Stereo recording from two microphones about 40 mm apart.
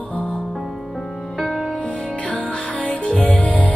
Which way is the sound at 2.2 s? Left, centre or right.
Left.